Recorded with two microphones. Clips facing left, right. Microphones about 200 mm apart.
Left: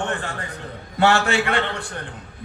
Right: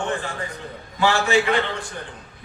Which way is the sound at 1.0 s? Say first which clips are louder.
Even; 65° left (ahead or behind).